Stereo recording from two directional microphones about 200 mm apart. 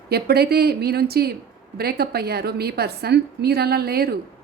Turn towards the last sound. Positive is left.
turn(degrees=-50)  # may be behind; listen again after turning